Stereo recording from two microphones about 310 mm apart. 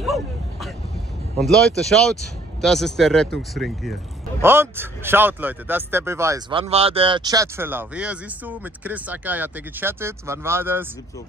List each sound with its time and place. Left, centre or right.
0.0 s vehicle: centre
1.9 s speech: centre